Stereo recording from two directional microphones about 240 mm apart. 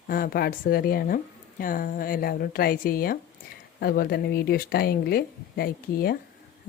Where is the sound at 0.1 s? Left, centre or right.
Left.